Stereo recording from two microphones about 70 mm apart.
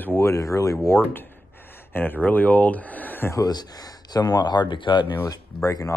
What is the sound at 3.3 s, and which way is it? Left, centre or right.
Speech, left.